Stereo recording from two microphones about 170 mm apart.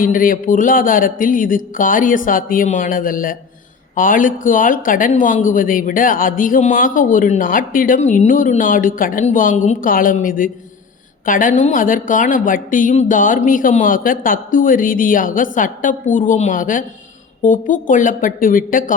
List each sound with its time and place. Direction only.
0.0 s speech: 55° left (ahead or behind)